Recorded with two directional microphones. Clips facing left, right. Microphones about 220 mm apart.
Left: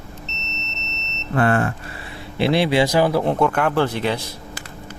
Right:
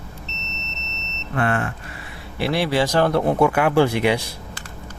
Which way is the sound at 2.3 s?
20° left (ahead or behind).